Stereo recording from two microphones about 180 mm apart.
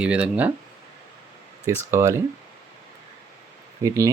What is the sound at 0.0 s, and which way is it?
Speech, 5° right (ahead or behind).